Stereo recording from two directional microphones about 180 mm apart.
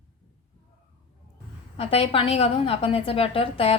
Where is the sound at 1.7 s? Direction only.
30° left (ahead or behind).